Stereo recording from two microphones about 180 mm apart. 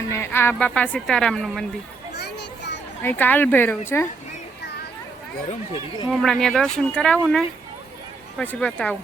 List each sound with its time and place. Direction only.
0.1 s speech: 15° left (ahead or behind)
2.1 s children playing: 70° left (ahead or behind)
3.0 s speech: 10° left (ahead or behind)
6.1 s speech: 5° left (ahead or behind)